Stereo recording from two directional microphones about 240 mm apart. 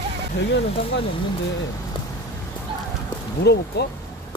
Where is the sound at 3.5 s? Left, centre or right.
Left.